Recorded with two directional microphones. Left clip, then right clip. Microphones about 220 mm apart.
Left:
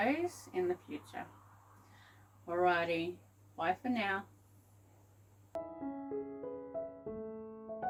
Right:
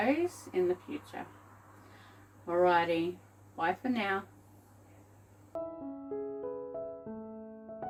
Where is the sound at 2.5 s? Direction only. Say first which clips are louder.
Right 5 dB; 10° left (ahead or behind).